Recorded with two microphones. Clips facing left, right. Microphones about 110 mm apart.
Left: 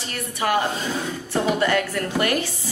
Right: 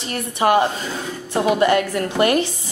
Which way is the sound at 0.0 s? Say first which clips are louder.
Right 6 dB; 25° right (ahead or behind).